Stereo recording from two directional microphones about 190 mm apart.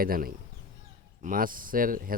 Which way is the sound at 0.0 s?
50° right (ahead or behind).